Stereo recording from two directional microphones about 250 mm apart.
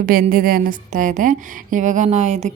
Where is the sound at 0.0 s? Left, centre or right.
Right.